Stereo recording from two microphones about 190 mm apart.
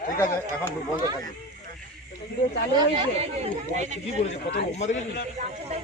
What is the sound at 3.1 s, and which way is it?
Speech, 35° right (ahead or behind).